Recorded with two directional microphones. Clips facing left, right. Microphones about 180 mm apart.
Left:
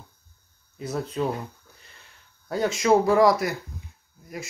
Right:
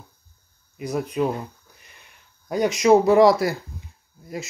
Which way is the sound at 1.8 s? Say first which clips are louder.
Right 1 dB; 15° right (ahead or behind).